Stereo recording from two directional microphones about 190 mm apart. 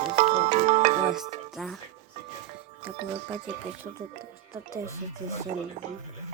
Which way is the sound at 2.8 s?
10° right (ahead or behind).